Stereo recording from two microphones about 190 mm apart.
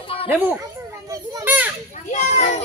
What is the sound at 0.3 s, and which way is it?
Speech, 10° right (ahead or behind).